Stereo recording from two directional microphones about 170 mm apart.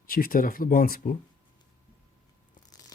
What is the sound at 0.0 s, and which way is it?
Speech, 55° left (ahead or behind).